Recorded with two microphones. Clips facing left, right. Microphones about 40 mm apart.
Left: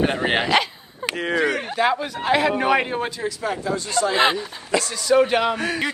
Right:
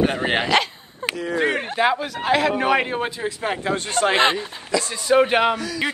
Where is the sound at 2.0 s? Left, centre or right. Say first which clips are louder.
Even; centre.